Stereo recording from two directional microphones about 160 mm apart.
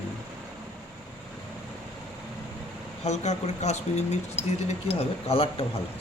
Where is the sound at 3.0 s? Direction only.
45° left (ahead or behind).